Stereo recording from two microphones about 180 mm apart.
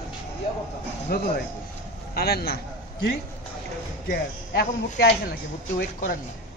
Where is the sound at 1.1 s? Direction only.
60° left (ahead or behind).